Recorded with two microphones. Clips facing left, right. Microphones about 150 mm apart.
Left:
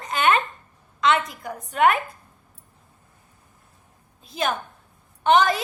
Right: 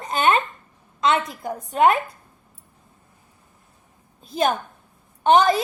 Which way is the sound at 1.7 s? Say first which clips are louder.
Right 2 dB; 30° right (ahead or behind).